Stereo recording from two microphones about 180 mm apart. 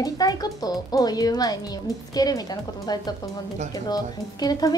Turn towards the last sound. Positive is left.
turn(degrees=20)  # may be behind; listen again after turning